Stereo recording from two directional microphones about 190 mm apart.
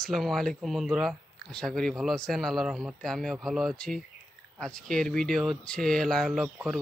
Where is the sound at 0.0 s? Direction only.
Centre (ahead or behind).